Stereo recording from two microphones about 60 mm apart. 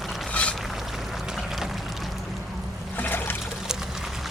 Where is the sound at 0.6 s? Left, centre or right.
Centre.